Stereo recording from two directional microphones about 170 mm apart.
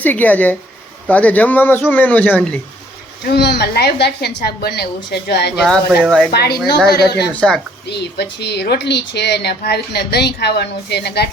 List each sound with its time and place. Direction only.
0.0 s speech: 10° left (ahead or behind)
3.2 s speech: 75° left (ahead or behind)
5.6 s speech: centre (ahead or behind)
6.3 s speech: 70° left (ahead or behind)
7.3 s speech: 5° left (ahead or behind)
7.9 s speech: 75° left (ahead or behind)